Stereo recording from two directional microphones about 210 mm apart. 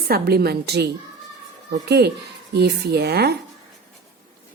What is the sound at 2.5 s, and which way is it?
Speech, 50° right (ahead or behind).